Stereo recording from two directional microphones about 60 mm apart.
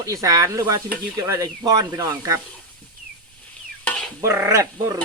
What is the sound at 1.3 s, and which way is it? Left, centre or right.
Speech, right.